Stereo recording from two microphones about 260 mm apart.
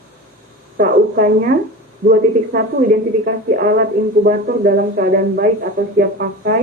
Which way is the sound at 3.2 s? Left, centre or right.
Right.